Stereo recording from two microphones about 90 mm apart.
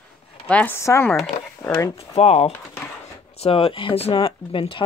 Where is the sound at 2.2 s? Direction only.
90° left.